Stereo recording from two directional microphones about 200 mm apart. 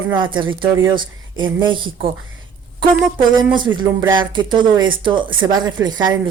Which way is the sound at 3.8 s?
25° right (ahead or behind).